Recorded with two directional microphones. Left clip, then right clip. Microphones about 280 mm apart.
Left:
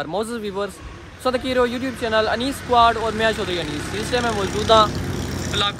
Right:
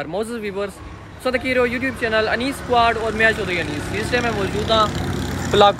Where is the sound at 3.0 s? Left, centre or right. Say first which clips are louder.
Right 3 dB; centre.